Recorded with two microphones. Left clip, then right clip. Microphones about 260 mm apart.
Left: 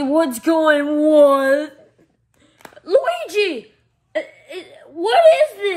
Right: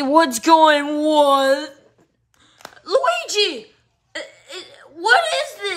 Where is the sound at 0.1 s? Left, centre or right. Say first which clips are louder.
Right 4 dB; centre.